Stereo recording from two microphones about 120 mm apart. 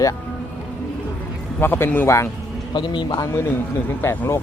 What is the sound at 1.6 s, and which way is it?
Speech, 20° left (ahead or behind).